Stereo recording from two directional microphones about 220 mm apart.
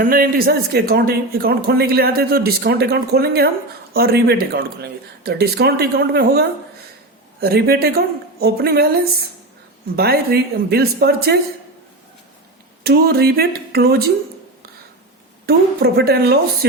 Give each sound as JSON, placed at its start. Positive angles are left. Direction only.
{"t": 0.0, "sound": "a man's voice", "side_deg": -40}
{"t": 12.8, "sound": "a man's voice", "side_deg": -45}
{"t": 15.4, "sound": "a man's voice", "side_deg": -45}